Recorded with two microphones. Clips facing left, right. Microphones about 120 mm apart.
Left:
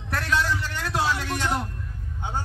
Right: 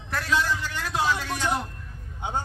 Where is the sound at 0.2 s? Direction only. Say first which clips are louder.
Even; 5° right (ahead or behind).